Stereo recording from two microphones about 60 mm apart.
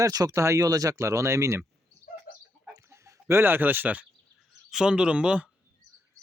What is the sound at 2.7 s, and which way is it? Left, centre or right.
Chicken, right.